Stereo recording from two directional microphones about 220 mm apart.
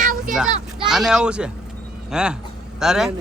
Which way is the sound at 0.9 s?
Centre (ahead or behind).